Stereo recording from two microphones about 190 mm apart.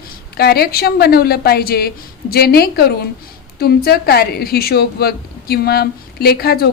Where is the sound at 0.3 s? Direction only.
55° left (ahead or behind).